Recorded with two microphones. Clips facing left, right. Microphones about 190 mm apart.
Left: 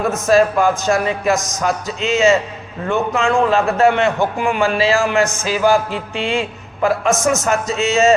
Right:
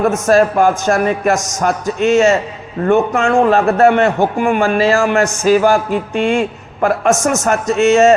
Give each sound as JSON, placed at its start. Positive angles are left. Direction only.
{"t": 0.3, "sound": "a man's voice", "side_deg": -50}